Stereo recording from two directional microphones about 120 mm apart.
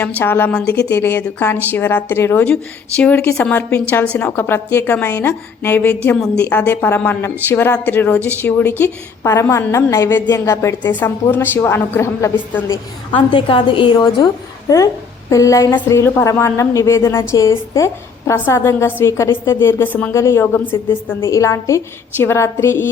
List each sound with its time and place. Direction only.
0.2 s a woman's voice: 15° left (ahead or behind)
13.1 s a woman's voice: 40° left (ahead or behind); by 22.9 s 20° left (ahead or behind)